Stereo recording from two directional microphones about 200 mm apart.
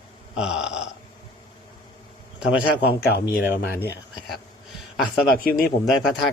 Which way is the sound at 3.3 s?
50° left (ahead or behind).